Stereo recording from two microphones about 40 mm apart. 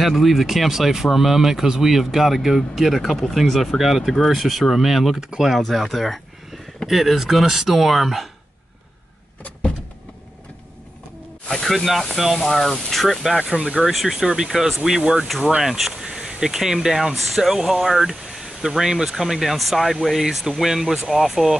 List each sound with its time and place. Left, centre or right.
0.0 s speech: centre
3.4 s speech: centre
5.6 s speech: centre
11.4 s speech: centre
11.7 s speech: centre
13.6 s speech: right
13.9 s speech: centre
15.0 s speech: right
15.6 s a sound: centre
16.3 s speech: centre